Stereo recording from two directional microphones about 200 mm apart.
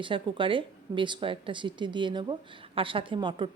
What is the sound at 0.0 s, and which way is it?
Speech, 25° right (ahead or behind).